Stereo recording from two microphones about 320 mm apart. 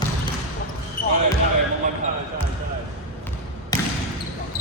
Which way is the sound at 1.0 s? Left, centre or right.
Left.